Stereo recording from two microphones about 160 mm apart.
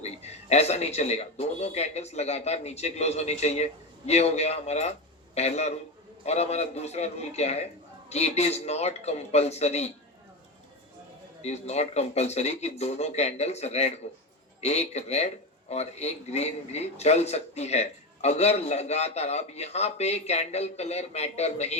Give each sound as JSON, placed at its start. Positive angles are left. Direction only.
{"t": 0.0, "sound": "a man's voice", "side_deg": 40}
{"t": 11.4, "sound": "a man's voice", "side_deg": 45}